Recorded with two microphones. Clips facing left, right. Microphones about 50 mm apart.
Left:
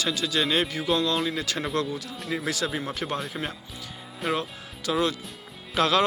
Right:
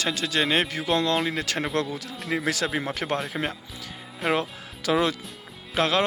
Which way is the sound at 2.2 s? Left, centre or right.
Right.